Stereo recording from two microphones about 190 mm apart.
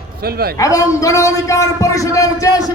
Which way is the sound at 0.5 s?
20° left (ahead or behind).